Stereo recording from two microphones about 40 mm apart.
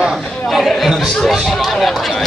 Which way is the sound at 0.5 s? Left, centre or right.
Centre.